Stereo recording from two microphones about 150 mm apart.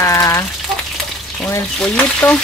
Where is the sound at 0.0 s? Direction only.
20° left (ahead or behind).